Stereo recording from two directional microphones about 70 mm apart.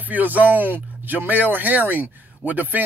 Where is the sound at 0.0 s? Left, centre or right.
Right.